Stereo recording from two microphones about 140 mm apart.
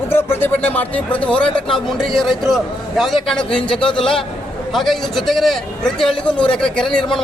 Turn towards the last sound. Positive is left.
turn(degrees=5)  # may be behind; listen again after turning